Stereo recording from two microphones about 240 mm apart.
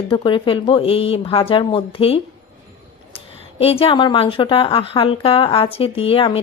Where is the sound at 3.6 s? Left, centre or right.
Left.